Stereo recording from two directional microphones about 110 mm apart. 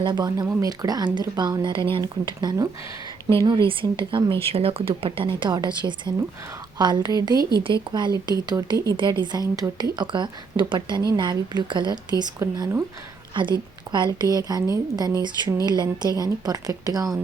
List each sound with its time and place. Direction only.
0.0 s speech: 40° right (ahead or behind)
7.6 s speech: 50° right (ahead or behind)
12.4 s speech: 30° right (ahead or behind)
13.9 s speech: 40° right (ahead or behind)